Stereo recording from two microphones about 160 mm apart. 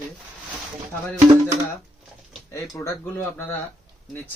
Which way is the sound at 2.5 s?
20° left (ahead or behind).